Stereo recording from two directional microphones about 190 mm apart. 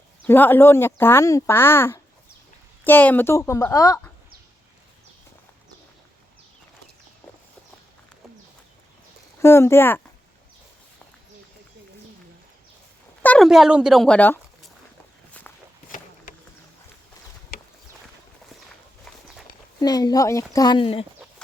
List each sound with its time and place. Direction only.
0.3 s speech: 10° left (ahead or behind)
9.4 s speech: 15° left (ahead or behind)
13.2 s speech: 5° left (ahead or behind)
15.3 s walk: 5° left (ahead or behind)
19.8 s speech: 20° left (ahead or behind)